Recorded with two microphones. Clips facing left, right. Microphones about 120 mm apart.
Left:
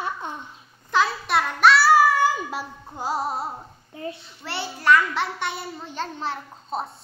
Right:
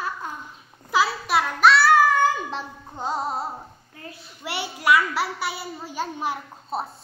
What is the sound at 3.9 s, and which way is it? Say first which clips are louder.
Child singing: left 9 dB; 25° left (ahead or behind).